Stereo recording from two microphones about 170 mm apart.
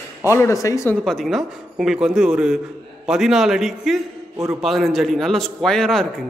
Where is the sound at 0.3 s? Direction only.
20° left (ahead or behind).